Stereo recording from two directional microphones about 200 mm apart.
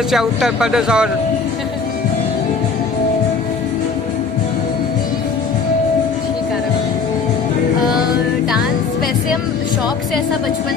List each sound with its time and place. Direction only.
0.1 s speech: centre (ahead or behind)